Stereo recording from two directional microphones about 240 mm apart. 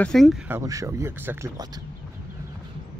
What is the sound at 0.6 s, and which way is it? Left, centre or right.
Speech, centre.